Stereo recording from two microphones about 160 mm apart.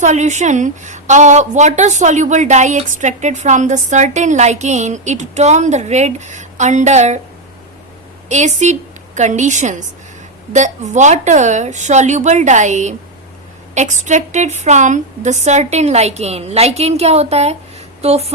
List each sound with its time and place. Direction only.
0.0 s a woman's voice: 50° right (ahead or behind)
8.3 s a woman's voice: 45° right (ahead or behind)